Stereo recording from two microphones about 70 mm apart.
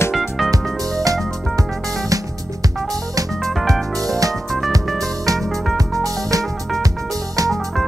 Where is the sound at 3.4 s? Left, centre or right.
Centre.